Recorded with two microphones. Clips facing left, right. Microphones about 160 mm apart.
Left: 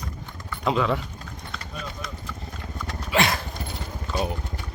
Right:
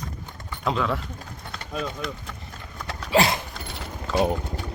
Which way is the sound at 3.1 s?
30° right (ahead or behind).